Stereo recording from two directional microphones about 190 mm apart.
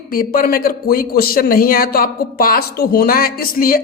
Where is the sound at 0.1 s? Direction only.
50° left (ahead or behind).